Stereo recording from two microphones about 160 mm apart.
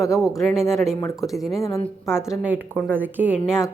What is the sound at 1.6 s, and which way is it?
Speech, 20° left (ahead or behind).